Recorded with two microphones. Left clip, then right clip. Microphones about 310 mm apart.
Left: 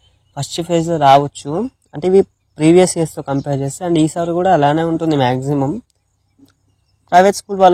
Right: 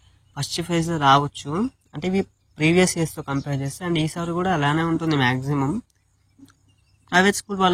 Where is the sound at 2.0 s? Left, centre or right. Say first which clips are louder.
Left 14 dB; centre.